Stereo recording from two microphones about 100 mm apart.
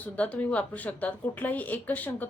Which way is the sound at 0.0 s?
15° left (ahead or behind).